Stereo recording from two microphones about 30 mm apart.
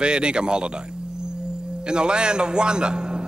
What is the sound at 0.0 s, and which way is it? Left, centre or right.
Speech, right.